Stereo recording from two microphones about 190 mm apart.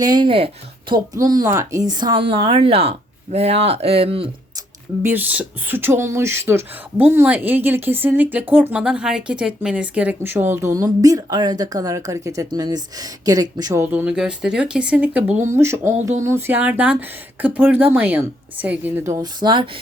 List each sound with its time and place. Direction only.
0.0 s speech: 25° right (ahead or behind)
5.0 s speech: 10° right (ahead or behind)